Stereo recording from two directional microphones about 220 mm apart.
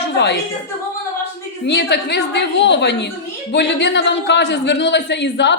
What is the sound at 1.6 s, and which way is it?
A woman's voice, 50° left (ahead or behind).